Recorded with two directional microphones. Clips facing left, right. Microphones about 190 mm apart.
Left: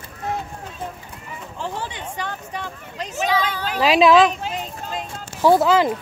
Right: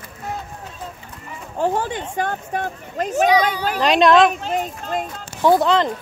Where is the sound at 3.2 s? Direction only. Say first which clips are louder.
Right 4 dB; 15° right (ahead or behind).